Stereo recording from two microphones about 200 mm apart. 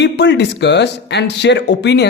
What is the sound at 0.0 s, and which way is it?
A man's voice, 60° left (ahead or behind).